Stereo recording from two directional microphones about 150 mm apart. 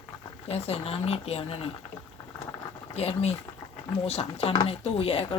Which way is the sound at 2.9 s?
45° left (ahead or behind).